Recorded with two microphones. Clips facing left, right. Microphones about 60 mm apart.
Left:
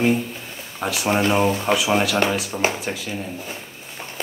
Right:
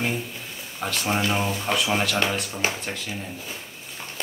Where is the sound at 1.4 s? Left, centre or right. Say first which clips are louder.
Left 7 dB; left.